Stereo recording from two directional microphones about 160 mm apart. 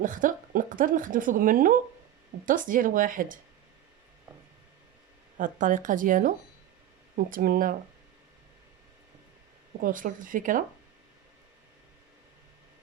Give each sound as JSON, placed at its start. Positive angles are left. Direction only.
{"t": 0.0, "sound": "speech", "side_deg": -55}
{"t": 5.4, "sound": "speech", "side_deg": -55}
{"t": 9.8, "sound": "speech", "side_deg": -55}